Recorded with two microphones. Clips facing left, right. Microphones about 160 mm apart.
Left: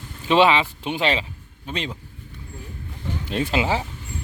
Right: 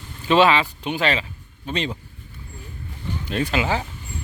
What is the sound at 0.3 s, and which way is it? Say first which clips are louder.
Speech: even; 20° left (ahead or behind).